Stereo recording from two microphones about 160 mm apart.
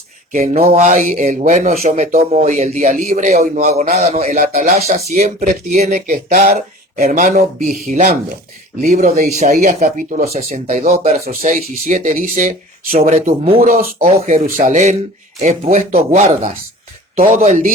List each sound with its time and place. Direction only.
0.3 s speech: 45° right (ahead or behind)
11.3 s speech: 55° right (ahead or behind)
12.9 s speech: 45° right (ahead or behind)